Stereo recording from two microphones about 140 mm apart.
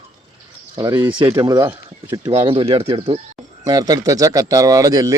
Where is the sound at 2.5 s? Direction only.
40° right (ahead or behind).